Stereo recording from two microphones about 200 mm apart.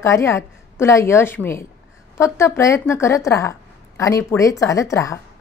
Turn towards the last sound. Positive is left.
turn(degrees=15)  # may be behind; listen again after turning